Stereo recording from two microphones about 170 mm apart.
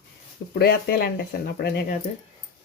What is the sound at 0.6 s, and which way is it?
Speech, 65° left (ahead or behind).